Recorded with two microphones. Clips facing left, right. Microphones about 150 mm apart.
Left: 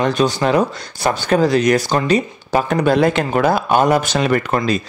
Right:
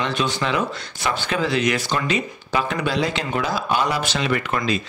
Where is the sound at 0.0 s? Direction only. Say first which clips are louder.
Left 7 dB; 40° left (ahead or behind).